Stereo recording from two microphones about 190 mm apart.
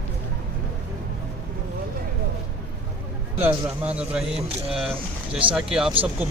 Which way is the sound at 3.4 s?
10° right (ahead or behind).